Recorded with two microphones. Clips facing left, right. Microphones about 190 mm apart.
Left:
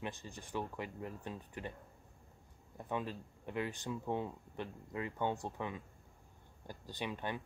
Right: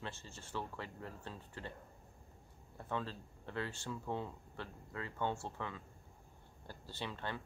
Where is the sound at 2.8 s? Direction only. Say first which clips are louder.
Left 2 dB; 15° left (ahead or behind).